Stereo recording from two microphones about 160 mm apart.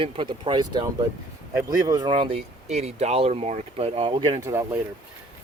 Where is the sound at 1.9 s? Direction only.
25° right (ahead or behind).